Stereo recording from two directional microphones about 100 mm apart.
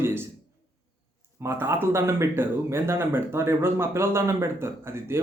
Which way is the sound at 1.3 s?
25° right (ahead or behind).